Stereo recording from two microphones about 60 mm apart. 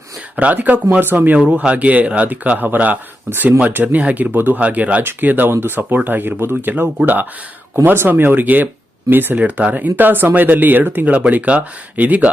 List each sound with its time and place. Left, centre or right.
0.3 s speech: right
4.4 s speech: right
4.6 s speech: right
9.4 s speech: right